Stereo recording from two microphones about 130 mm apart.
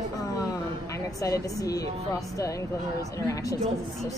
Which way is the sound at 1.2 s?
25° left (ahead or behind).